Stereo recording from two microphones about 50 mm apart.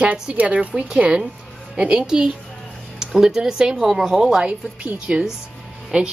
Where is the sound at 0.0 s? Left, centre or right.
Right.